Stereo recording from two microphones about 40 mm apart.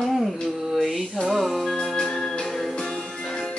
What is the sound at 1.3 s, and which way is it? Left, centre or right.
Music, centre.